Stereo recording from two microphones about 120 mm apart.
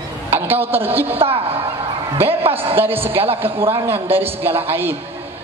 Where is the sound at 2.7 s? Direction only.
20° right (ahead or behind).